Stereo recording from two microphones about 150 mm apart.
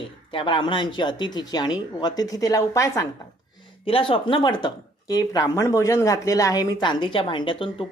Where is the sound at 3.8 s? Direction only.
35° left (ahead or behind).